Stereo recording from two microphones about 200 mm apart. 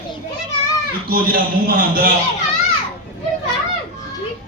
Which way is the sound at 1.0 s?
50° right (ahead or behind).